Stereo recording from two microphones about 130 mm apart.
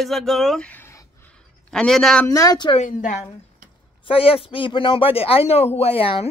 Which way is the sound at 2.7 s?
80° left.